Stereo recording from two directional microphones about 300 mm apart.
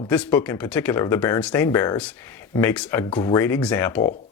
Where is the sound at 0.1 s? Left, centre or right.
Centre.